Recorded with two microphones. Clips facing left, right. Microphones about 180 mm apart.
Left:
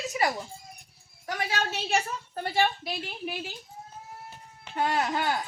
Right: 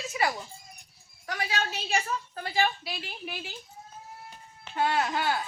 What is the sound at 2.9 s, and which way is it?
Speech, 45° left (ahead or behind).